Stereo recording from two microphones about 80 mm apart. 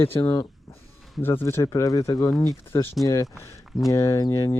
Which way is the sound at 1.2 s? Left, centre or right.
Left.